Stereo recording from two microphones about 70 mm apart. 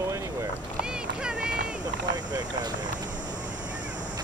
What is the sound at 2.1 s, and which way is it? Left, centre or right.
Speech, right.